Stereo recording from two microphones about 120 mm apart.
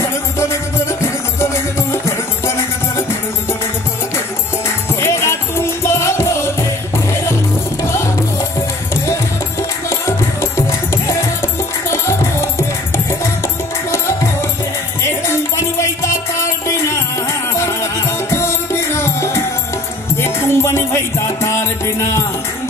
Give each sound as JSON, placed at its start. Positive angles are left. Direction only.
{"t": 0.0, "sound": "music", "side_deg": 25}
{"t": 5.0, "sound": "music", "side_deg": 20}
{"t": 7.8, "sound": "music", "side_deg": 25}